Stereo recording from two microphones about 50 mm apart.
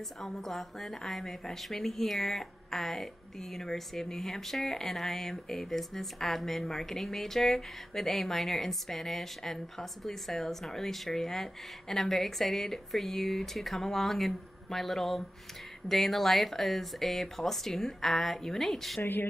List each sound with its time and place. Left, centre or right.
0.2 s a woman's voice: centre
18.9 s speech: left